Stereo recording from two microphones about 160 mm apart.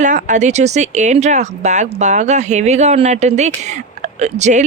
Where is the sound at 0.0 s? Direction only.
50° right (ahead or behind).